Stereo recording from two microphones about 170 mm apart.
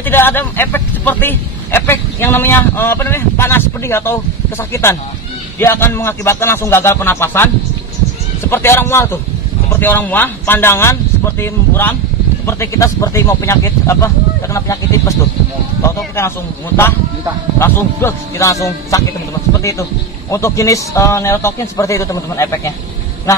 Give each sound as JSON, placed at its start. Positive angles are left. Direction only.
{"t": 0.0, "sound": "speech", "side_deg": 10}
{"t": 5.6, "sound": "speech", "side_deg": 15}
{"t": 8.5, "sound": "speech", "side_deg": 15}
{"t": 16.2, "sound": "speech", "side_deg": 15}